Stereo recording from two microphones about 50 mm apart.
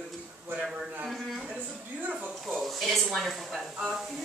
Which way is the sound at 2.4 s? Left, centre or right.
Centre.